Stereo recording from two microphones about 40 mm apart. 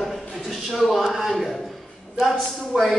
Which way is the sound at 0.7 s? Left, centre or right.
Centre.